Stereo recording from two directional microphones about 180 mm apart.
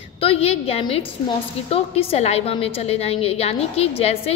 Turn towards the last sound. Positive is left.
turn(degrees=35)  # may be behind; listen again after turning